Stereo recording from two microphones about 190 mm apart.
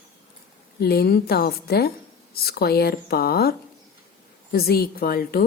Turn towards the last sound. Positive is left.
turn(degrees=50)  # may be behind; listen again after turning